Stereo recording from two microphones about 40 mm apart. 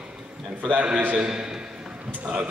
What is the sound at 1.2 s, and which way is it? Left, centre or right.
Speech, centre.